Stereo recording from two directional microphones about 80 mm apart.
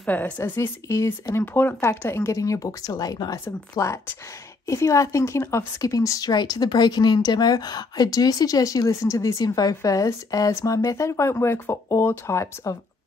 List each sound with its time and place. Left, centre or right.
0.0 s a woman's voice: left
0.4 s speech: left
1.4 s speech: left
1.8 s speech: left
3.7 s speech: left
5.8 s speech: left
9.4 s speech: left